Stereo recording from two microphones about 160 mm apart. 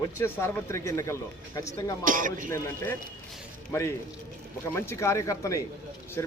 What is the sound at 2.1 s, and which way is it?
Speech, 55° right (ahead or behind).